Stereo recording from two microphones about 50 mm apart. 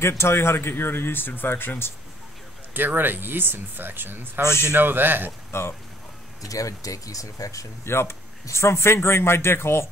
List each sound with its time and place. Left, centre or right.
0.0 s speech: left
2.7 s speech: right
4.5 s a man's voice: left
4.7 s speech: right
5.5 s speech: left
7.8 s a man's voice: left